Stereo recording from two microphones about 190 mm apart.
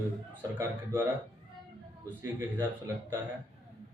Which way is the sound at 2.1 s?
10° right (ahead or behind).